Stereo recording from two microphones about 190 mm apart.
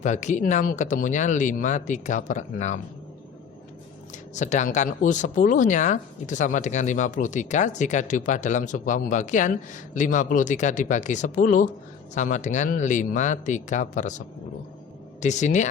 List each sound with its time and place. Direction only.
0.0 s speech: 40° left (ahead or behind)
4.4 s speech: 40° left (ahead or behind)